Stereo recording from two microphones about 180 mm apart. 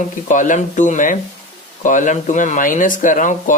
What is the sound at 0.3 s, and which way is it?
Speech, 45° left (ahead or behind).